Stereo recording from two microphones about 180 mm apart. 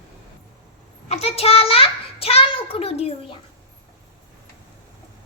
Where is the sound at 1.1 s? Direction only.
35° left (ahead or behind).